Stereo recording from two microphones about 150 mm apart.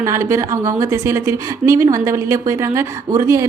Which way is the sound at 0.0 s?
20° right (ahead or behind).